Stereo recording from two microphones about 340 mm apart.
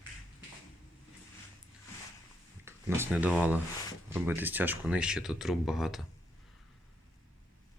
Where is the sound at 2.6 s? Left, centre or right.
Centre.